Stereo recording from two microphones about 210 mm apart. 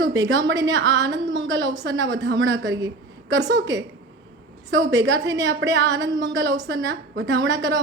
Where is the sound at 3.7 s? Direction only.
15° right (ahead or behind).